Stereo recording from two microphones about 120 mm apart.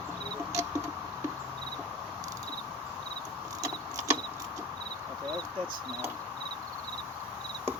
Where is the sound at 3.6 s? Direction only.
25° right (ahead or behind).